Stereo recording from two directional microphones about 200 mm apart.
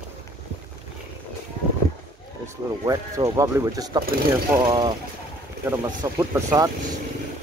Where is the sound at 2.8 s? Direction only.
20° right (ahead or behind).